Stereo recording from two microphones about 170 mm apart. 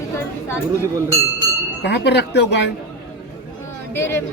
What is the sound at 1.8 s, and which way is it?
Speech, 85° left.